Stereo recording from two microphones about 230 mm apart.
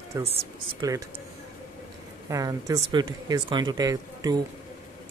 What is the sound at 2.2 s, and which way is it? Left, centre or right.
Speech, centre.